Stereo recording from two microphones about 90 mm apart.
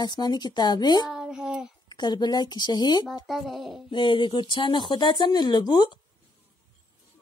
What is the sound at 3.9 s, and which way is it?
Speech, 60° left (ahead or behind).